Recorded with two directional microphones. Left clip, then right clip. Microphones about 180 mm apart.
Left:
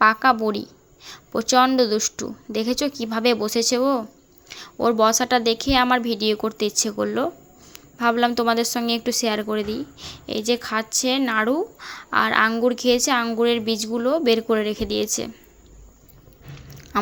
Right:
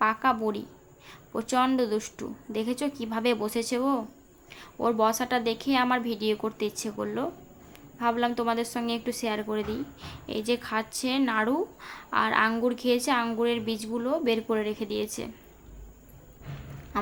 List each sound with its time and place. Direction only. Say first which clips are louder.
0.0 s a woman's voice: left 8 dB; 25° left (ahead or behind)
16.9 s duck: left 7 dB; 30° left (ahead or behind)